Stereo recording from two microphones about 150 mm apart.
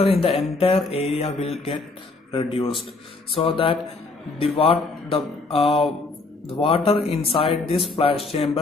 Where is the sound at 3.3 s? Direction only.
35° left (ahead or behind).